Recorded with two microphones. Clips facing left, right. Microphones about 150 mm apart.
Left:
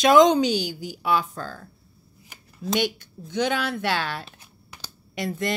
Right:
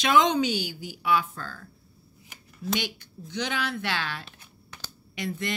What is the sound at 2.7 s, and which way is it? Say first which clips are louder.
Speech: left 6 dB; 50° left (ahead or behind).